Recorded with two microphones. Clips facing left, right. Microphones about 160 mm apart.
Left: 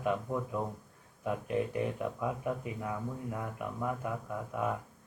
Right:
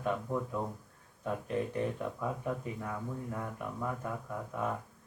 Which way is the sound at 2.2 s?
10° left (ahead or behind).